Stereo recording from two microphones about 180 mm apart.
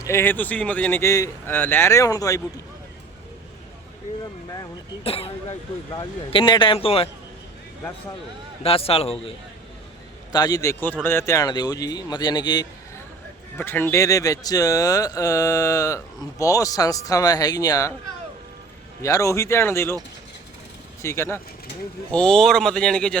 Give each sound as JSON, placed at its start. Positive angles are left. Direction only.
{"t": 0.0, "sound": "speech", "side_deg": 15}
{"t": 5.0, "sound": "speech", "side_deg": 35}
{"t": 8.6, "sound": "speech", "side_deg": 35}
{"t": 10.3, "sound": "speech", "side_deg": 20}
{"t": 13.6, "sound": "speech", "side_deg": 10}
{"t": 19.0, "sound": "speech", "side_deg": 15}
{"t": 21.0, "sound": "speech", "side_deg": 15}